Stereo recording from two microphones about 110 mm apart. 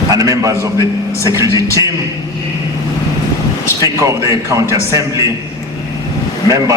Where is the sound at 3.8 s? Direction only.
30° right (ahead or behind).